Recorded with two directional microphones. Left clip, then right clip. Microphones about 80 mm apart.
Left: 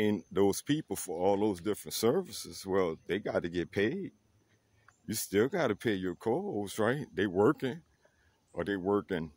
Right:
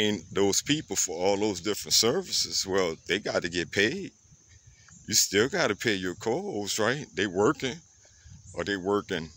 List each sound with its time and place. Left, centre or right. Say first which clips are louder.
0.1 s speech: right 3 dB; left
0.8 s speech: right 4 dB; left; by 3.3 s centre
3.3 s speech: right 4 dB; left
5.0 s speech: right 14 dB; left
5.3 s speech: even; left
6.6 s speech: right 4 dB; left
7.5 s speech: right 4 dB; left